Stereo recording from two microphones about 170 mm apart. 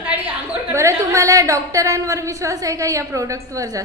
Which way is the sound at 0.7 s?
15° right (ahead or behind).